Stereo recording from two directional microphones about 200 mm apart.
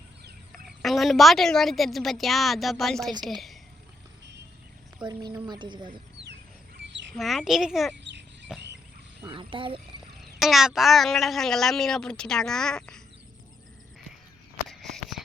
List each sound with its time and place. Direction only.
0.5 s a child's voice: centre (ahead or behind)
5.0 s speech: 20° right (ahead or behind)
7.1 s a child's voice: centre (ahead or behind)
8.0 s a sound: 60° right (ahead or behind)
9.2 s speech: 25° right (ahead or behind)
10.4 s a child's voice: centre (ahead or behind)
14.7 s a sound: centre (ahead or behind)